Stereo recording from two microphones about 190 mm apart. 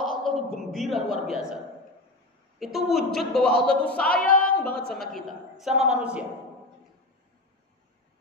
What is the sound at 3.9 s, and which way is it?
Singing, 5° left (ahead or behind).